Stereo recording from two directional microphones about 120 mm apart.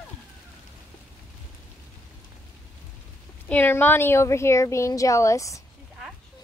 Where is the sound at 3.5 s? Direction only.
15° left (ahead or behind).